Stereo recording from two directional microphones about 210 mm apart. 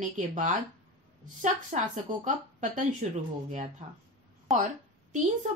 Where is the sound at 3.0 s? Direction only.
35° right (ahead or behind).